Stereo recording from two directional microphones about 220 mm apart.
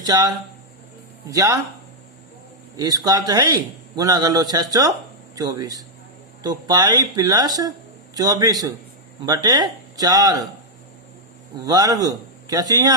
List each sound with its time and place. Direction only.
0.0 s a man's voice: 15° right (ahead or behind)
2.7 s a man's voice: 15° right (ahead or behind)
11.6 s a man's voice: 15° right (ahead or behind)